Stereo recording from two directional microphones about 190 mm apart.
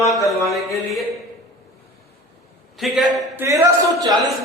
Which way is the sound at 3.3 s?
15° right (ahead or behind).